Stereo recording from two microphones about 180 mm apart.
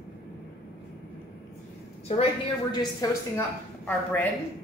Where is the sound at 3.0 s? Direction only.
20° left (ahead or behind).